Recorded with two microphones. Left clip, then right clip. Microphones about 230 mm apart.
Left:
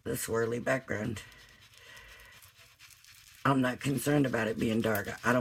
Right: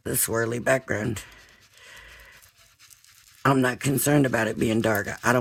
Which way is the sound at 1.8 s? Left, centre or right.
Right.